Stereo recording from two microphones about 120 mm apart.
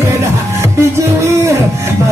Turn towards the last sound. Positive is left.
turn(degrees=-25)  # may be behind; listen again after turning